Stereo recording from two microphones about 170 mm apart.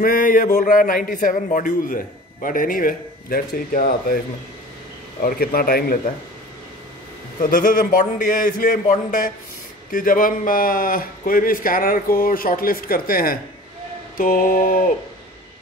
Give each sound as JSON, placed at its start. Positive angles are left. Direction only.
{"t": 0.0, "sound": "a man's voice", "side_deg": 55}
{"t": 5.2, "sound": "a man's voice", "side_deg": 60}
{"t": 7.4, "sound": "a man's voice", "side_deg": 55}